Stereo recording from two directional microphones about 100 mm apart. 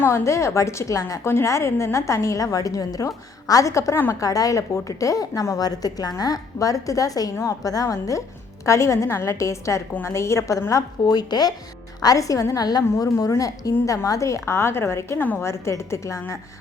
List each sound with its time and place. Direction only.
0.0 s a woman's voice: 30° left (ahead or behind)